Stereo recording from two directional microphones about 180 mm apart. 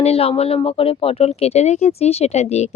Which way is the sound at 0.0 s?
35° left (ahead or behind).